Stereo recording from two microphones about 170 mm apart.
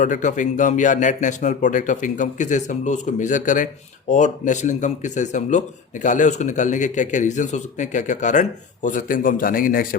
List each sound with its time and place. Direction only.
0.0 s speech: 50° left (ahead or behind)